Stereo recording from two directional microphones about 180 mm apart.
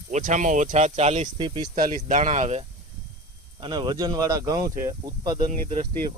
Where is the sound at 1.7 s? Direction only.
50° right (ahead or behind).